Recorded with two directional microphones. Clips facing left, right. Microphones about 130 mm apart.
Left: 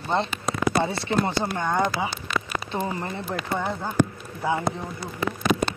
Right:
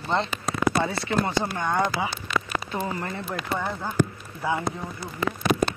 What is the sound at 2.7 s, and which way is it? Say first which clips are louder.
Speech: left 3 dB; 20° left (ahead or behind).